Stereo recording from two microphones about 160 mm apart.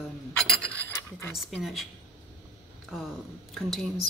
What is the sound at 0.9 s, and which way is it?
Speech, 15° left (ahead or behind).